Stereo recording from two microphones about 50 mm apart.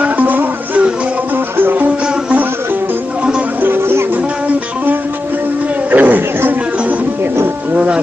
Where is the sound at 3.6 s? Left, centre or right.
Right.